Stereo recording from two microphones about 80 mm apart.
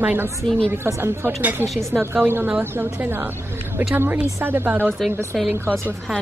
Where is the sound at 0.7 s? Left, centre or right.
Right.